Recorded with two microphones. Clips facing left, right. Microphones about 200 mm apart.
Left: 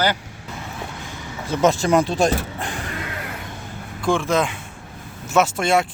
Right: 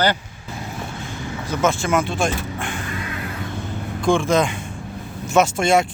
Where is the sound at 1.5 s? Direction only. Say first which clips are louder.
Left 3 dB; 35° left (ahead or behind).